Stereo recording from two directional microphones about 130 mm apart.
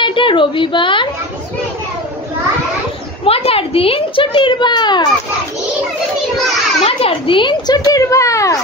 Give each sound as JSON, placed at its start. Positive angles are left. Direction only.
{"t": 0.0, "sound": "a woman's voice", "side_deg": 40}
{"t": 3.3, "sound": "a child's voice", "side_deg": 45}
{"t": 6.8, "sound": "a child's voice", "side_deg": 50}